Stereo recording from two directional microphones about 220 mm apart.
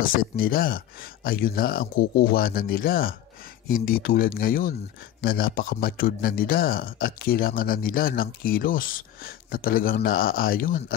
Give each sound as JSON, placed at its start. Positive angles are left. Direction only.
{"t": 0.0, "sound": "a man's voice", "side_deg": 40}